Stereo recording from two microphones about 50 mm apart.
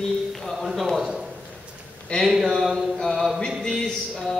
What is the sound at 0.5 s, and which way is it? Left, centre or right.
Speech, centre.